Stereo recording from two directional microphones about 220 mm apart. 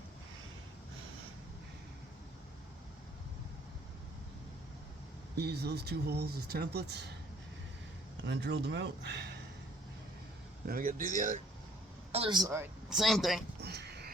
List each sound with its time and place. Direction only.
5.4 s speech: 50° right (ahead or behind)
8.3 s speech: 50° right (ahead or behind)
10.7 s speech: 40° right (ahead or behind)
12.1 s speech: 25° right (ahead or behind)
12.9 s speech: centre (ahead or behind)
13.6 s a sound: 50° right (ahead or behind)